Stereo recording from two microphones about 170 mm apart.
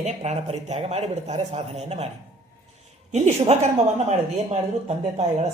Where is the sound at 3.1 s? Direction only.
40° right (ahead or behind).